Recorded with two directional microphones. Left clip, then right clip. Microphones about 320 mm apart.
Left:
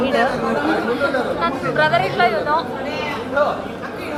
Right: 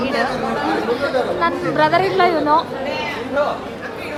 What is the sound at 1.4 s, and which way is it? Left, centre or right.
Speech, centre.